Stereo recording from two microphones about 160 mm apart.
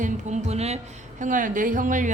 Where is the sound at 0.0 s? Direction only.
45° right (ahead or behind).